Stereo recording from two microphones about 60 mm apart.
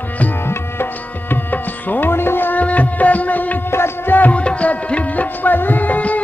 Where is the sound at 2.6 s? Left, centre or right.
Left.